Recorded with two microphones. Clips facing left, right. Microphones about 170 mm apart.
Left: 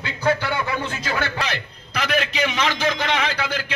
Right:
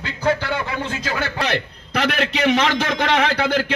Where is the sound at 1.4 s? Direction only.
65° right (ahead or behind).